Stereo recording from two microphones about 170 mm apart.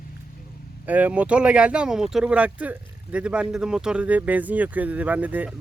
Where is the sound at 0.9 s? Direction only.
10° right (ahead or behind).